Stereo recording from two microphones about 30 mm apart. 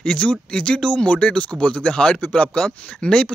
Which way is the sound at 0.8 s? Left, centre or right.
Left.